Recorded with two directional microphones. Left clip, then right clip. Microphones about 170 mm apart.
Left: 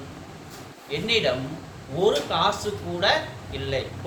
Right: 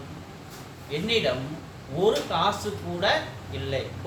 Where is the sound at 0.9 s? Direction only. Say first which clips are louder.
Left 2 dB; 20° left (ahead or behind).